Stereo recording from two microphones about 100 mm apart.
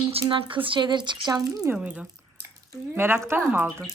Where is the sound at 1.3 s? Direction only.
35° right (ahead or behind).